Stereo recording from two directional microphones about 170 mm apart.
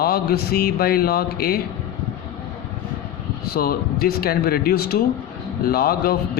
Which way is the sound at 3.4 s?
65° left (ahead or behind).